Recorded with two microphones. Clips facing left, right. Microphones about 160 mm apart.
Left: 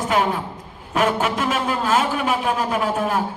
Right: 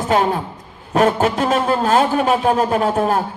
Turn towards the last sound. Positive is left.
turn(degrees=-35)  # may be behind; listen again after turning